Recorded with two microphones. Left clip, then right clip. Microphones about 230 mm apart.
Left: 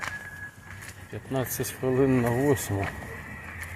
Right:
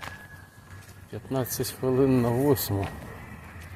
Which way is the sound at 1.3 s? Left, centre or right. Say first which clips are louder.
Even; centre.